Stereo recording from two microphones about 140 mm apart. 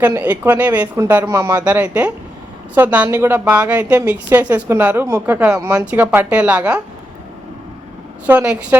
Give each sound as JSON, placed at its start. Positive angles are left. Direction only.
{"t": 0.0, "sound": "a woman's voice", "side_deg": -10}
{"t": 1.6, "sound": "a woman's voice", "side_deg": -10}
{"t": 8.3, "sound": "a woman's voice", "side_deg": -10}